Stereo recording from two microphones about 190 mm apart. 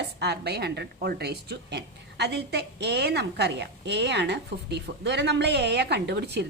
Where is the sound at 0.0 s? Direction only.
60° right (ahead or behind).